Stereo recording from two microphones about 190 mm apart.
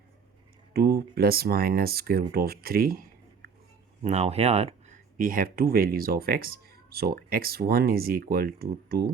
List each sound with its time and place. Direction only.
0.7 s speech: 55° right (ahead or behind)
3.4 s a sound: 55° right (ahead or behind)
4.0 s speech: 35° right (ahead or behind)
5.1 s speech: 45° right (ahead or behind)